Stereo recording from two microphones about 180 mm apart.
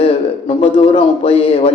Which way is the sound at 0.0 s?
35° left (ahead or behind).